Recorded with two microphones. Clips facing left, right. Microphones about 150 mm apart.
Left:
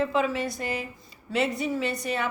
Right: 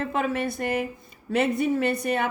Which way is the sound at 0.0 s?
55° right (ahead or behind).